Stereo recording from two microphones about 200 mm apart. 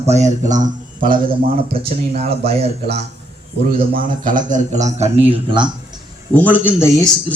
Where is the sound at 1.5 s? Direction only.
30° right (ahead or behind).